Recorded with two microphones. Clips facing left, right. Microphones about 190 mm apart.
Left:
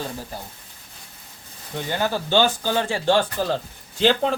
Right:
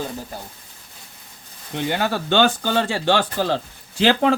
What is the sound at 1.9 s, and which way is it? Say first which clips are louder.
Speech: even; 70° right (ahead or behind).